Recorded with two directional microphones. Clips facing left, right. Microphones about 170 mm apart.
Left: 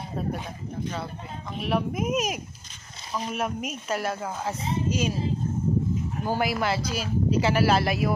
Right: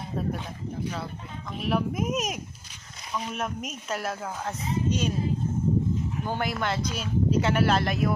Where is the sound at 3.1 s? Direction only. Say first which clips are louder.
Left 2 dB; 35° left (ahead or behind).